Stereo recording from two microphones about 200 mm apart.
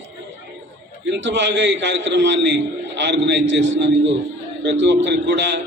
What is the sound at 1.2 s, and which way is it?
A man's voice, 65° right (ahead or behind).